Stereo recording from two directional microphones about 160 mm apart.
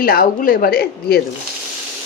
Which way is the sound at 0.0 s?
70° left (ahead or behind).